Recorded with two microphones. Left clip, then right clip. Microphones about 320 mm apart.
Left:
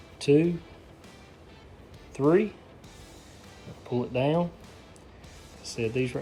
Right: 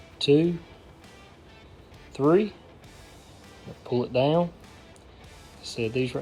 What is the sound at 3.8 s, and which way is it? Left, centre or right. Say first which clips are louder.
Speech: right 4 dB; centre.